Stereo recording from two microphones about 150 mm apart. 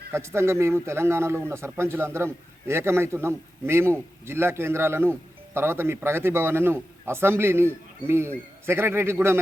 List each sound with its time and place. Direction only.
0.1 s a man's voice: 15° right (ahead or behind)